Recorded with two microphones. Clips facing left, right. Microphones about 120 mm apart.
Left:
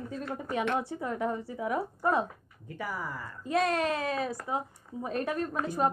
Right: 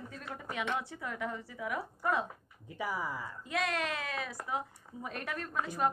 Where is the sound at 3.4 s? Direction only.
35° left (ahead or behind).